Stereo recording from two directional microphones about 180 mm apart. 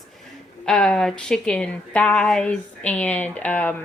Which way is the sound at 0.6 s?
5° left (ahead or behind).